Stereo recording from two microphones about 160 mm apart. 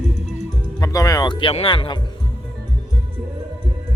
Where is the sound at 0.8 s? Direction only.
20° left (ahead or behind).